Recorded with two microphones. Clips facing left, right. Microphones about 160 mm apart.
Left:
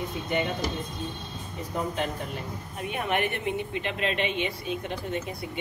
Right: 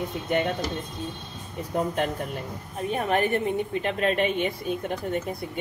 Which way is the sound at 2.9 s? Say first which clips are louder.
Right 4 dB; 35° right (ahead or behind).